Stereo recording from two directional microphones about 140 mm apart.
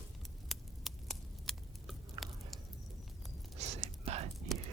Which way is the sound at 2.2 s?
30° right (ahead or behind).